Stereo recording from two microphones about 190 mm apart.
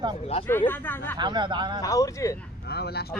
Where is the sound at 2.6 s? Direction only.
60° left (ahead or behind).